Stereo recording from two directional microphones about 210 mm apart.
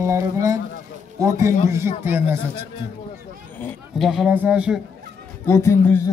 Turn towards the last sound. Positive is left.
turn(degrees=15)  # may be behind; listen again after turning